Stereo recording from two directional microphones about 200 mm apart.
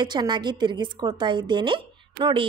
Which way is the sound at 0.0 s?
20° right (ahead or behind).